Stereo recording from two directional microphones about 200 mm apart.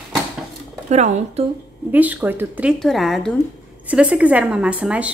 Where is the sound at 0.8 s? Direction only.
35° right (ahead or behind).